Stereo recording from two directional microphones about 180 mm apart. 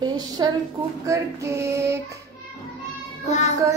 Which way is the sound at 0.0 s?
25° right (ahead or behind).